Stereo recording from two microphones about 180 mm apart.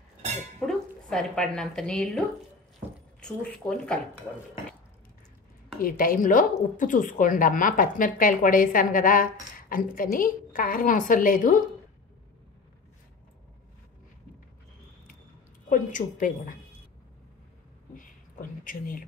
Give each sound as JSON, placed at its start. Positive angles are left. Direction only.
{"t": 0.6, "sound": "speech", "side_deg": 5}
{"t": 5.8, "sound": "a woman's voice", "side_deg": 50}
{"t": 15.7, "sound": "a woman's voice", "side_deg": 45}
{"t": 18.6, "sound": "a woman's voice", "side_deg": 50}